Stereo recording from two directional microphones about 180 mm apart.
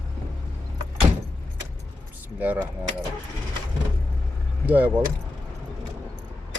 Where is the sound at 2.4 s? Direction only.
10° right (ahead or behind).